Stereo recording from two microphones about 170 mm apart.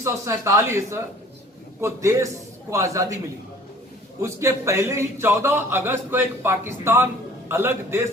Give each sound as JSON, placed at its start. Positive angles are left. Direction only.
{"t": 0.0, "sound": "a man's voice", "side_deg": -15}
{"t": 4.2, "sound": "a man's voice", "side_deg": -15}